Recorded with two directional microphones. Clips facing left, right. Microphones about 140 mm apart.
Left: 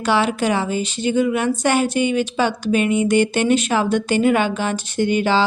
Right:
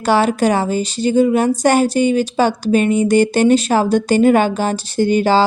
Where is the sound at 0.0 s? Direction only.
40° right (ahead or behind).